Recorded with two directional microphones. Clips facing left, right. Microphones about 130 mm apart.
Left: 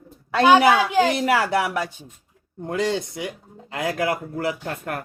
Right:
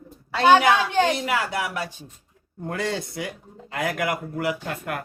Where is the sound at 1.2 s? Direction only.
35° left (ahead or behind).